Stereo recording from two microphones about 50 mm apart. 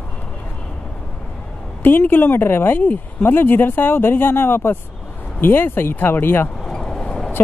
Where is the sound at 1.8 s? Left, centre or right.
Left.